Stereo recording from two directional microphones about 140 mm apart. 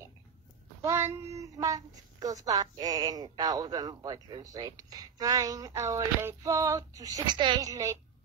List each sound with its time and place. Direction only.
0.8 s speech: 15° right (ahead or behind)